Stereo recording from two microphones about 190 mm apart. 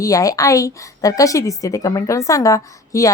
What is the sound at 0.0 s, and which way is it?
Speech, 15° left (ahead or behind).